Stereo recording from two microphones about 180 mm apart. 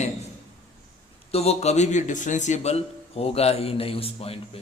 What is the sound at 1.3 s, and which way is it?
A man's voice, 35° left (ahead or behind).